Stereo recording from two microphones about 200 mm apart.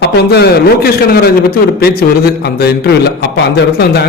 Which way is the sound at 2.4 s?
55° left (ahead or behind).